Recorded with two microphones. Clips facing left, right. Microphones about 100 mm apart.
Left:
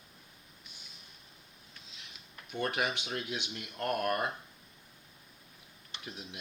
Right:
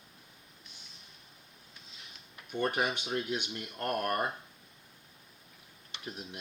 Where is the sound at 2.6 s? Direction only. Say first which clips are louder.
Right 2 dB; 35° right (ahead or behind).